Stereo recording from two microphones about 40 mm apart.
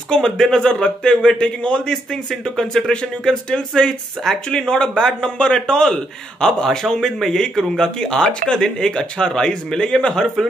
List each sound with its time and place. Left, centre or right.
0.1 s speech: centre
1.9 s speech: centre